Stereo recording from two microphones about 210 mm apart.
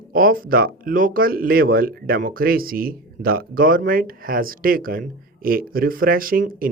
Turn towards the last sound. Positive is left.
turn(degrees=-40)  # may be behind; listen again after turning